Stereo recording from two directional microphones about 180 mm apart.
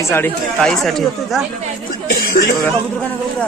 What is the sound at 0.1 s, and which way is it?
Speech, 10° left (ahead or behind).